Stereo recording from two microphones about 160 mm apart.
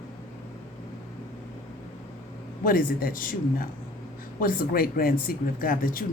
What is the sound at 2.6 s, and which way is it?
Speech, 65° left (ahead or behind).